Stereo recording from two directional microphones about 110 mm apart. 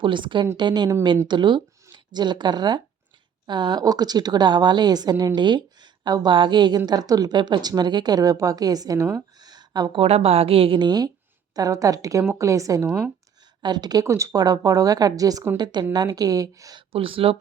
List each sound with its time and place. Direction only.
0.0 s a woman's voice: 45° right (ahead or behind)
9.4 s a sound: 40° right (ahead or behind)
10.0 s a woman's voice: 65° right (ahead or behind); by 16.8 s 35° right (ahead or behind)
16.9 s a woman's voice: 55° right (ahead or behind)